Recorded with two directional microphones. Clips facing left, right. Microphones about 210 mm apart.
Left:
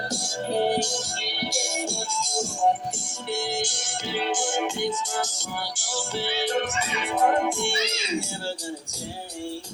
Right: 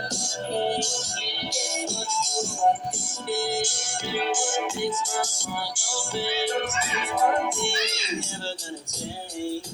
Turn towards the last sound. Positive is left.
turn(degrees=0)  # may be behind; listen again after turning